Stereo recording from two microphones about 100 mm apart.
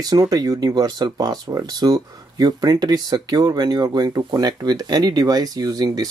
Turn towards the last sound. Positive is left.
turn(degrees=-40)  # may be behind; listen again after turning